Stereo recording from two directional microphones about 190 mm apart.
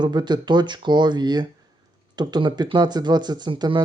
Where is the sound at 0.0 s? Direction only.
25° right (ahead or behind).